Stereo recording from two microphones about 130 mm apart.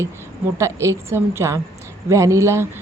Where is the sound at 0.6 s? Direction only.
20° right (ahead or behind).